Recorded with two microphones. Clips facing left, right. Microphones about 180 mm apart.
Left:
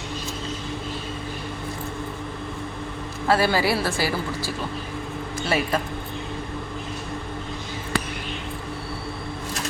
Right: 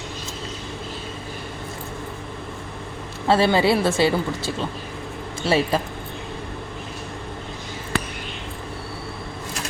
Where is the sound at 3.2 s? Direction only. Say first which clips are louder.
Right 3 dB; 25° right (ahead or behind).